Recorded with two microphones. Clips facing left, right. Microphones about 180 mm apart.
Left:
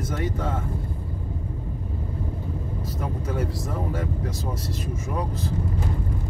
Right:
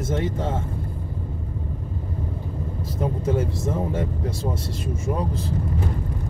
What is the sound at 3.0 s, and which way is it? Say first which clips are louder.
Speech: right 6 dB; 25° right (ahead or behind).